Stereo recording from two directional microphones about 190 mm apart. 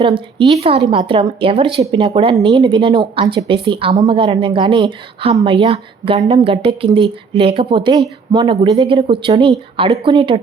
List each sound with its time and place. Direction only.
0.0 s a woman's voice: 25° right (ahead or behind)